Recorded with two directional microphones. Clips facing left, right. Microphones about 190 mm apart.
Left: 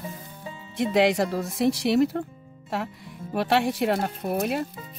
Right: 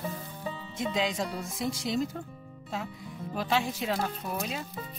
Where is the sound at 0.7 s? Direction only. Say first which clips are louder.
Left 10 dB; 70° left (ahead or behind).